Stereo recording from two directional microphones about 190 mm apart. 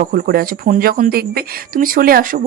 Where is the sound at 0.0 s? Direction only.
50° right (ahead or behind).